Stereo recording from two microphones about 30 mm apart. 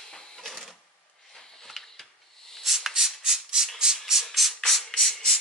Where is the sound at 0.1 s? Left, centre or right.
Centre.